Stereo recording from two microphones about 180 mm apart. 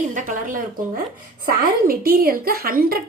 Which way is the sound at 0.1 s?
45° right (ahead or behind).